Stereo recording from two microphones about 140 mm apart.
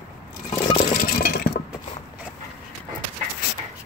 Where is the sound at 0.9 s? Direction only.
90° left.